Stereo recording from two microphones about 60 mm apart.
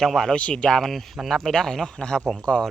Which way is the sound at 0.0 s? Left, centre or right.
Centre.